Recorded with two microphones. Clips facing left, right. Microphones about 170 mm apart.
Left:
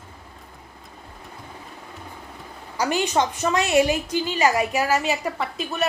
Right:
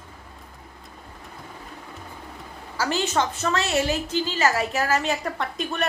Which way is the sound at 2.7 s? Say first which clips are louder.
Left 2 dB; 15° left (ahead or behind).